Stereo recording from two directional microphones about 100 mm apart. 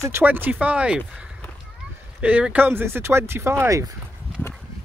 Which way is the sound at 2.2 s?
15° right (ahead or behind).